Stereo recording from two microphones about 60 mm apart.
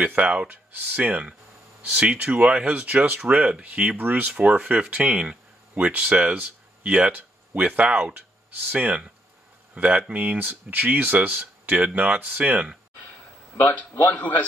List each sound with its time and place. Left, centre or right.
0.0 s speech: right
13.7 s speech: left